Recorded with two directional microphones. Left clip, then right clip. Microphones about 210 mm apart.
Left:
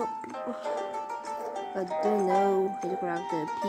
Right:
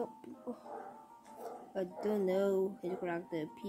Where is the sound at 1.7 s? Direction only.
5° left (ahead or behind).